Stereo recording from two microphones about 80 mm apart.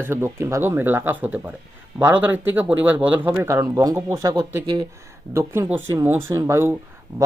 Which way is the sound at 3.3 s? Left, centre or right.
Right.